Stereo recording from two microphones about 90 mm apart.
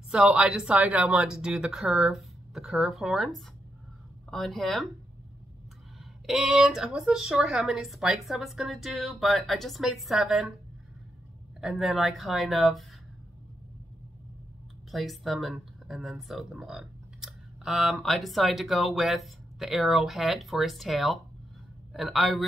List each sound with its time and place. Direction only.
0.1 s speech: 10° right (ahead or behind)
6.2 s speech: centre (ahead or behind)
11.6 s speech: centre (ahead or behind)
14.9 s speech: centre (ahead or behind)